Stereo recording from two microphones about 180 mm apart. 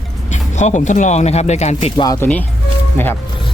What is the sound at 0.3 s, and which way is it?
Speech, 40° left (ahead or behind).